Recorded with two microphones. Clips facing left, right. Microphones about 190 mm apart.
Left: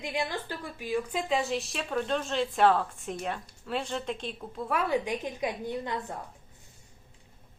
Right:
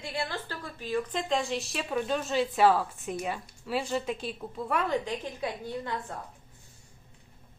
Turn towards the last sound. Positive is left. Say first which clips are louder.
# left 2 dB
turn(degrees=15)  # may be behind; listen again after turning